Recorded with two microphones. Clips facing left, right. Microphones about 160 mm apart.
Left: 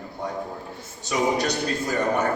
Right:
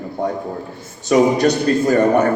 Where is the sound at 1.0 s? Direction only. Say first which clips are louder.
Right 10 dB; 55° right (ahead or behind).